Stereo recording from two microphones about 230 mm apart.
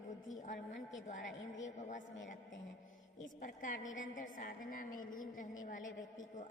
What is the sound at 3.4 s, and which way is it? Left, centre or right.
A woman's voice, left.